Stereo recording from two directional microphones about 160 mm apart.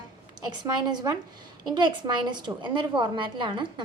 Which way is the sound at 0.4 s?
25° right (ahead or behind).